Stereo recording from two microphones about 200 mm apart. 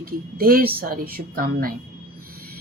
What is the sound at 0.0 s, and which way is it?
Speech, 45° right (ahead or behind).